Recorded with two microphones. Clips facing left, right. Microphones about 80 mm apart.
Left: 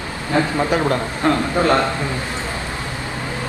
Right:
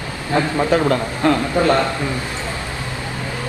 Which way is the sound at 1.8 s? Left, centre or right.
Left.